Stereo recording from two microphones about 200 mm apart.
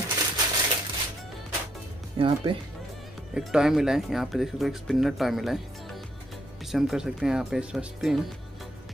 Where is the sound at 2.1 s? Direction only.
25° right (ahead or behind).